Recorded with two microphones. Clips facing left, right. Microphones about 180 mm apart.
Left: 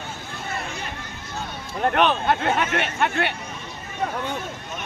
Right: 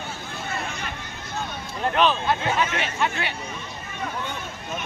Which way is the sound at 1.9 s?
60° left (ahead or behind).